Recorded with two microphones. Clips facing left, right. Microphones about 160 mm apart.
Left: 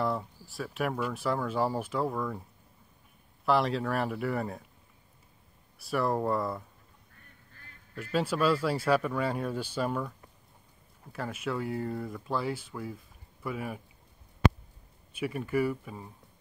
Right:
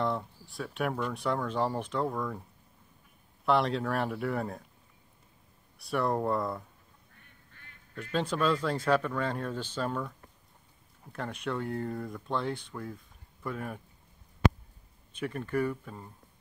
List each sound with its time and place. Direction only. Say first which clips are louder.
0.0 s speech: even; 5° left (ahead or behind)
3.4 s speech: even; centre (ahead or behind)
5.8 s speech: even; centre (ahead or behind)
7.6 s quack: left 1 dB; 40° left (ahead or behind)
7.9 s speech: left 2 dB; 5° left (ahead or behind)
15.1 s speech: left 2 dB; 10° left (ahead or behind)